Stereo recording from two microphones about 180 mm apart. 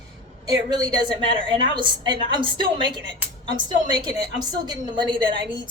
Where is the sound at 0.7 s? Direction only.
25° right (ahead or behind).